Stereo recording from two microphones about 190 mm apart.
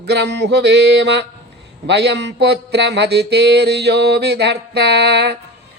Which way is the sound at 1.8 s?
65° right (ahead or behind).